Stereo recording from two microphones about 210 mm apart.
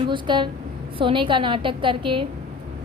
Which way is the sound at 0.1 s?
20° right (ahead or behind).